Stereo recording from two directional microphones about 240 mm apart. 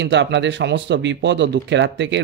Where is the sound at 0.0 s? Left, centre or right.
Right.